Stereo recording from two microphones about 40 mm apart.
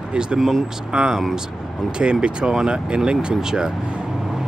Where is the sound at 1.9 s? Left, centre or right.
Right.